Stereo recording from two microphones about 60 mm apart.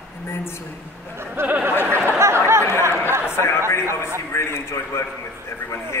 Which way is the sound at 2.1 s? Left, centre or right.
Right.